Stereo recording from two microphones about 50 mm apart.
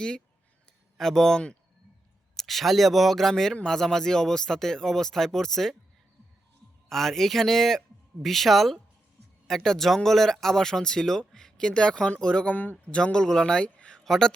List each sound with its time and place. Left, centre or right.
0.9 s a man's voice: centre
6.8 s a man's voice: centre
13.7 s a sound: left
14.0 s speech: centre